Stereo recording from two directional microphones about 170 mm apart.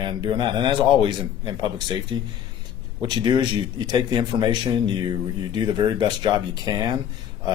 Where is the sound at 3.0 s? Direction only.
25° right (ahead or behind).